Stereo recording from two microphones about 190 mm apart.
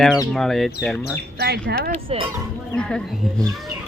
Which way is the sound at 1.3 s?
60° right (ahead or behind).